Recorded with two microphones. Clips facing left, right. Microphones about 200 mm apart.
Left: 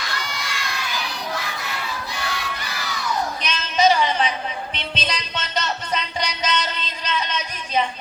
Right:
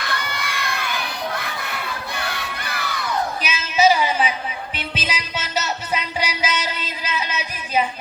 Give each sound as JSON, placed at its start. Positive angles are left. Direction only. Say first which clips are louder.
{"t": 0.0, "sound": "children shouting", "louder": "right 3 dB", "side_deg": -55}
{"t": 2.1, "sound": "crowd", "louder": "even", "side_deg": -55}
{"t": 3.4, "sound": "music", "louder": "right 1 dB", "side_deg": -5}